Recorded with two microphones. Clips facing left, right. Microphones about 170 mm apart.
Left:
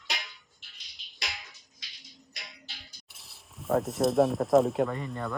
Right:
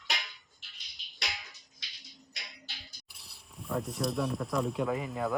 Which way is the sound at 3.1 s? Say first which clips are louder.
Left 1 dB; centre (ahead or behind).